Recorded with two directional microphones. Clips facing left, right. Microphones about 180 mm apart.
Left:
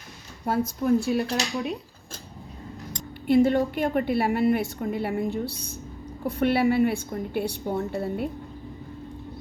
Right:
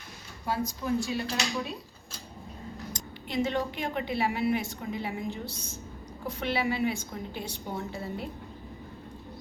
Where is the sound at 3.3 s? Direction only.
55° left (ahead or behind).